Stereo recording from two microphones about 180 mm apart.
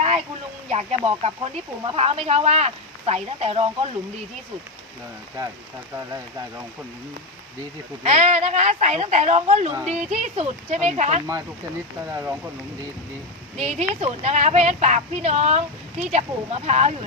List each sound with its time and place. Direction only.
0.7 s a woman's voice: 35° right (ahead or behind)
8.0 s a woman's voice: 35° right (ahead or behind)
12.0 s speech: 15° right (ahead or behind)
13.6 s a woman's voice: 35° right (ahead or behind)